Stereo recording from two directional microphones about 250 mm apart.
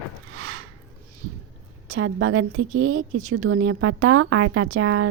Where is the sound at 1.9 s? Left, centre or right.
Right.